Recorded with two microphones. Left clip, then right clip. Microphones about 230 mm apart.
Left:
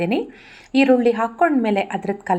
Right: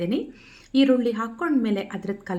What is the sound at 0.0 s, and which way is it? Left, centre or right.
A woman's voice, centre.